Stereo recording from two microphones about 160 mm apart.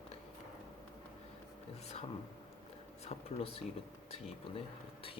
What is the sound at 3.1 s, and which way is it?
Speech, 35° left (ahead or behind).